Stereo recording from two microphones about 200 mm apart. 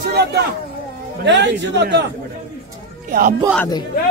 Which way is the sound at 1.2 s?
60° right (ahead or behind).